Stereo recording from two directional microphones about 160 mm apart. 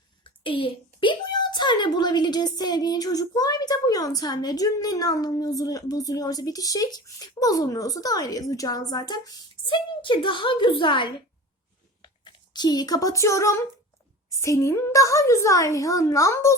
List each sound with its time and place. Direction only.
0.3 s a woman's voice: 35° left (ahead or behind); by 16.6 s 20° left (ahead or behind)